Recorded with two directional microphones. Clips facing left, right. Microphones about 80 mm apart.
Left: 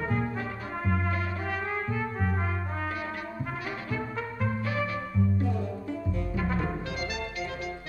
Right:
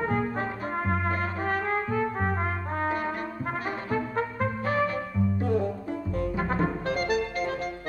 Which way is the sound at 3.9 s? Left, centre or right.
Right.